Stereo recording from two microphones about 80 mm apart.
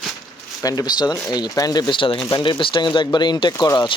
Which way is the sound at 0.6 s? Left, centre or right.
Left.